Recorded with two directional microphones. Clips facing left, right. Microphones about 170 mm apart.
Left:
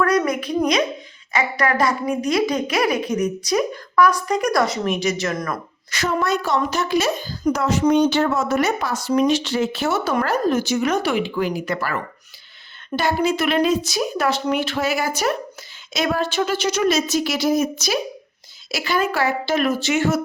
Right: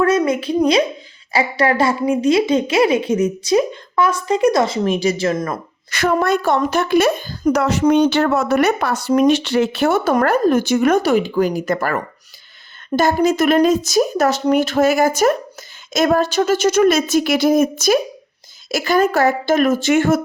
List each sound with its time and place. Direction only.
0.0 s a woman's voice: 25° right (ahead or behind)
5.9 s a child's voice: 55° right (ahead or behind)
13.0 s speech: 45° right (ahead or behind)